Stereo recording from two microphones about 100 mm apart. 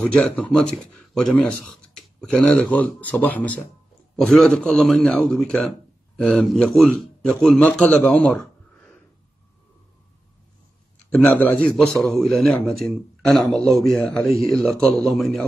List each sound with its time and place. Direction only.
0.0 s a man's voice: 10° left (ahead or behind)
11.1 s speech: 15° left (ahead or behind)
11.7 s a man's voice: 5° left (ahead or behind)